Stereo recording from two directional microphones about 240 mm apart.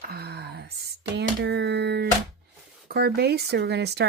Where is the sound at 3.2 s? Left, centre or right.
Right.